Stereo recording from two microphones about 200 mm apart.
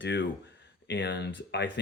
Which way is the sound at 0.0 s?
65° left (ahead or behind).